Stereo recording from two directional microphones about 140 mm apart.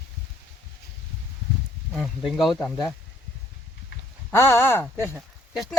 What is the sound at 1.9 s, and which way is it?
Speech, centre (ahead or behind).